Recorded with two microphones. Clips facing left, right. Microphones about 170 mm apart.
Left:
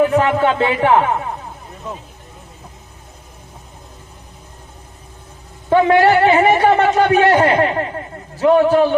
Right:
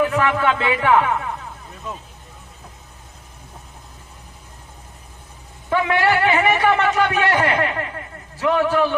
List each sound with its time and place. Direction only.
0.0 s a man's voice: 35° left (ahead or behind)
5.6 s a man's voice: 35° left (ahead or behind)